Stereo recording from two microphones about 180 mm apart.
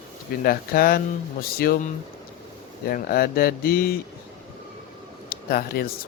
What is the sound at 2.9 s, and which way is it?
Speech, 55° left (ahead or behind).